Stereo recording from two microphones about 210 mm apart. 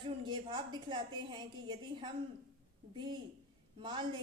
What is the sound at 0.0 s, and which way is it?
A woman's voice, 20° right (ahead or behind).